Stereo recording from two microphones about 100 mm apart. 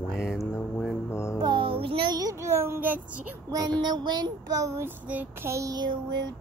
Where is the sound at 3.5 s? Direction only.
45° right (ahead or behind); by 4.9 s 30° right (ahead or behind).